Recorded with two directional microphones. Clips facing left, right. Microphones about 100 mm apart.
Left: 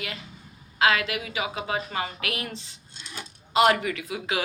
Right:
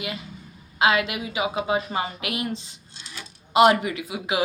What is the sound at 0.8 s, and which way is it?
A woman's voice, 20° right (ahead or behind).